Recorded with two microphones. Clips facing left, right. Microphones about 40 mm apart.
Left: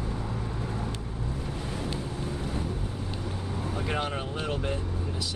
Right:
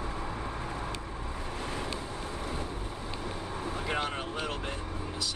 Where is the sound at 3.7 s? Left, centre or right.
Centre.